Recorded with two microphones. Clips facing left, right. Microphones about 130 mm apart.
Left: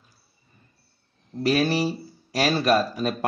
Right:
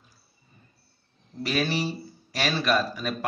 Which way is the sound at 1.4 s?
40° left (ahead or behind).